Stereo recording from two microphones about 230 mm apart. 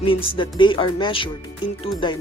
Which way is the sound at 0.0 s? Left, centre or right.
Left.